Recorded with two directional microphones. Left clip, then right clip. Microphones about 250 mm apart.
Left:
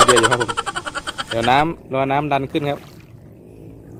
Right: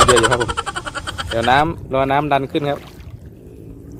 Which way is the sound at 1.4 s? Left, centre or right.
Centre.